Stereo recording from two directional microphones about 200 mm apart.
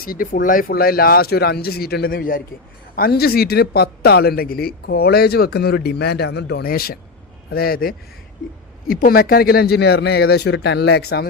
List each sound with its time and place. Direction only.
0.0 s speech: 45° left (ahead or behind)